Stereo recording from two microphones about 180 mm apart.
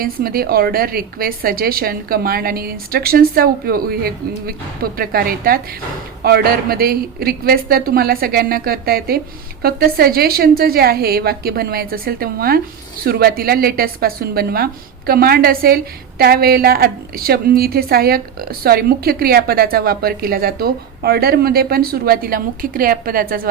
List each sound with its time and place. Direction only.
0.0 s a woman's voice: 55° right (ahead or behind)